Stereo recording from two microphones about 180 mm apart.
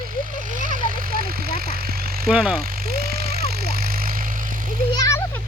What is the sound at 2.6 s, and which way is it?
Vehicle, 55° right (ahead or behind).